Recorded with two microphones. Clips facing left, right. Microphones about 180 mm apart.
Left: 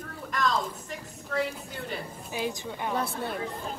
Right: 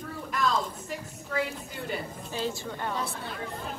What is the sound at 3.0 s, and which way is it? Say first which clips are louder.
Speech: left 3 dB; 60° left (ahead or behind).